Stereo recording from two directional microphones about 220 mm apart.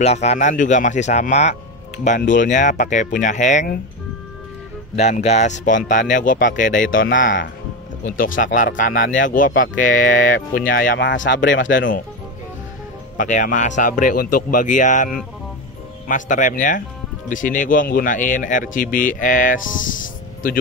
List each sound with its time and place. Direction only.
0.0 s speech: 30° left (ahead or behind)
4.9 s speech: 30° left (ahead or behind)
8.5 s speech: 40° left (ahead or behind)
11.0 s speech: 55° left (ahead or behind)
13.2 s speech: 35° left (ahead or behind)
16.1 s speech: 35° left (ahead or behind)